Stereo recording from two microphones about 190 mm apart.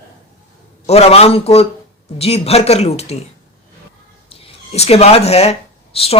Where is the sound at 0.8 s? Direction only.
35° left (ahead or behind).